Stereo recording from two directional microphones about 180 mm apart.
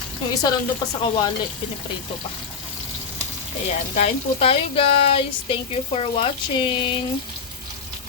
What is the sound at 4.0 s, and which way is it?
Speech, 35° left (ahead or behind).